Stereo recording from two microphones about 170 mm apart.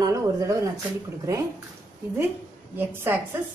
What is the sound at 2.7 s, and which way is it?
Speech, 15° right (ahead or behind).